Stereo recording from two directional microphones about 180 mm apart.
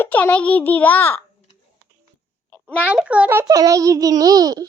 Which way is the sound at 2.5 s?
10° left (ahead or behind).